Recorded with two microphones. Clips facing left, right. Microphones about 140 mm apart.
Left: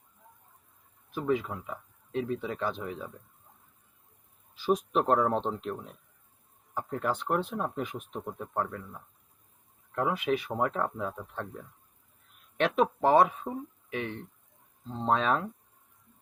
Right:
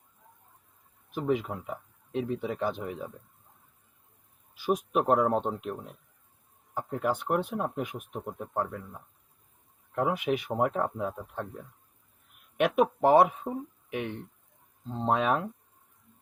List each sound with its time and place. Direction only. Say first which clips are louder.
1.1 s speech: right 1 dB; 20° right (ahead or behind)
4.5 s speech: even; 10° right (ahead or behind)